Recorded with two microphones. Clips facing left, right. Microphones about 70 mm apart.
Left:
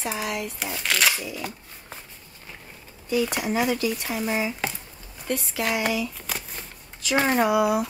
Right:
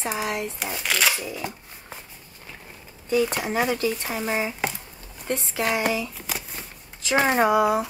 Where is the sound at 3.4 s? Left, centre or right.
Right.